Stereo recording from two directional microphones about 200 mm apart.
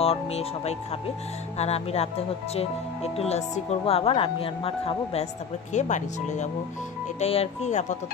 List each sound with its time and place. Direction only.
0.0 s speech: 30° left (ahead or behind)